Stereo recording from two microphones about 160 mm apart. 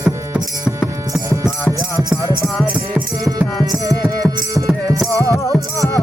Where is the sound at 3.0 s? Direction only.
15° right (ahead or behind).